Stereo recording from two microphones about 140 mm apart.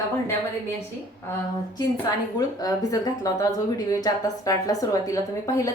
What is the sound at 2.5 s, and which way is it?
A woman's voice, 25° left (ahead or behind).